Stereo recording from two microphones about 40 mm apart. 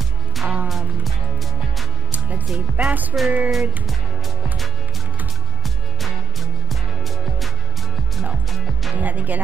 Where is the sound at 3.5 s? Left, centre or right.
Centre.